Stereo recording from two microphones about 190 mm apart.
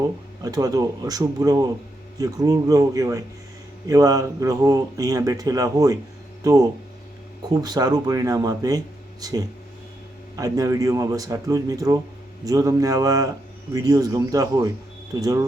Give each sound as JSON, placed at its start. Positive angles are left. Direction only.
{"t": 0.4, "sound": "speech", "side_deg": -20}